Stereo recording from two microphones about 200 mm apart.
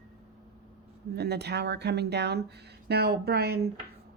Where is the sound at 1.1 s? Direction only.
55° right (ahead or behind).